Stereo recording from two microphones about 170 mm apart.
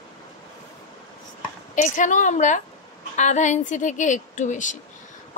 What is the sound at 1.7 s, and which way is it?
Speech, 50° left (ahead or behind).